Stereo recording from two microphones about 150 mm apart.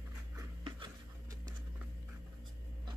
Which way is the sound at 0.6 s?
25° right (ahead or behind).